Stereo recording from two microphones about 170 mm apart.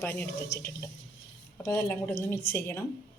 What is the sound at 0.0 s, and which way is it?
Speech, 15° left (ahead or behind).